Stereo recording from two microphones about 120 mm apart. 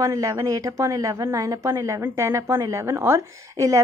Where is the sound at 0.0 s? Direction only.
30° right (ahead or behind).